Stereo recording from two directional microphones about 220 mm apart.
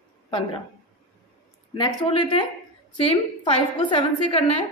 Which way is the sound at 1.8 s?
20° left (ahead or behind).